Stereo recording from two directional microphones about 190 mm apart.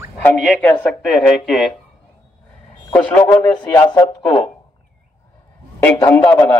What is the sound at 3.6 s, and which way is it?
Speech, 10° left (ahead or behind).